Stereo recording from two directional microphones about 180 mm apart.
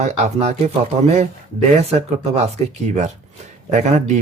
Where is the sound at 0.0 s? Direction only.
40° right (ahead or behind).